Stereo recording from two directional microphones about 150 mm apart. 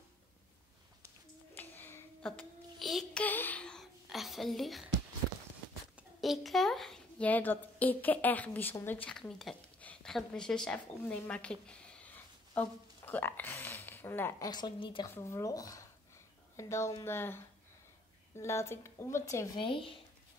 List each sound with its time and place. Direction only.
1.6 s child singing: 15° left (ahead or behind)
3.3 s a sound: 10° left (ahead or behind)
5.9 s a child's voice: centre (ahead or behind); by 14.5 s 15° left (ahead or behind)
14.5 s a woman's voice: 30° left (ahead or behind)
15.0 s speech: 20° left (ahead or behind)
19.5 s a woman's voice: 35° left (ahead or behind)